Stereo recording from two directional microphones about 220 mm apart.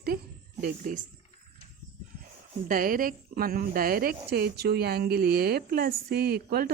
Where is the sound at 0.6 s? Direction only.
35° right (ahead or behind).